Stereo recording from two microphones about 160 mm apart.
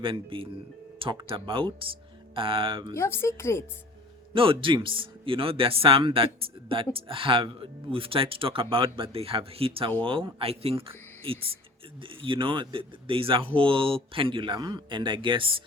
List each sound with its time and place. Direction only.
0.0 s speech: 35° right (ahead or behind)
2.9 s speech: 15° left (ahead or behind)
4.4 s speech: 35° right (ahead or behind)